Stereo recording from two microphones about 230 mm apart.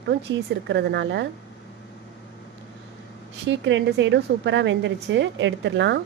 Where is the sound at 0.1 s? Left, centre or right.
Right.